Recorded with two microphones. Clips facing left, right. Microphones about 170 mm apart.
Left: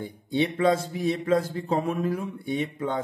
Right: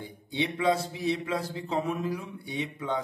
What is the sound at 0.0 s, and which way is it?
A man's voice, 50° left (ahead or behind).